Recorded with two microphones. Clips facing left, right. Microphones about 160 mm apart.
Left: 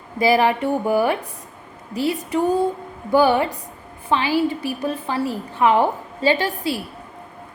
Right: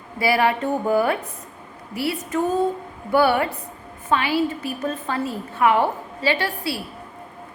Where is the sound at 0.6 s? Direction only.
10° left (ahead or behind).